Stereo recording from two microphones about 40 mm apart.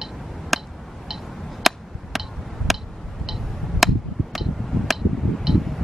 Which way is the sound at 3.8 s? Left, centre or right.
Centre.